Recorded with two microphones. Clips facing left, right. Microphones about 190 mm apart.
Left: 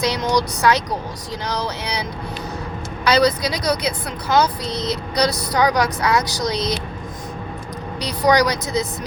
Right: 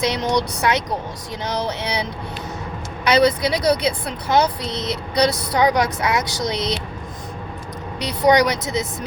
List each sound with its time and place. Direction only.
0.0 s speech: 25° right (ahead or behind)
8.0 s speech: 25° right (ahead or behind)